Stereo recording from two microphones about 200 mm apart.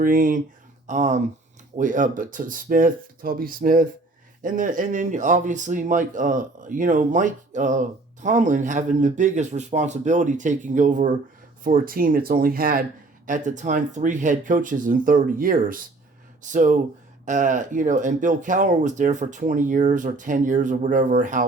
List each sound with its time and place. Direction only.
0.0 s speech: 45° right (ahead or behind)